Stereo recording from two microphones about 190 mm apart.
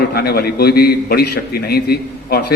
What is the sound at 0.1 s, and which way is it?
A man's voice, 55° left (ahead or behind).